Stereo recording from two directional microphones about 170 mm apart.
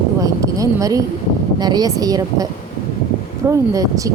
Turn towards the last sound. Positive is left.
turn(degrees=-20)  # may be behind; listen again after turning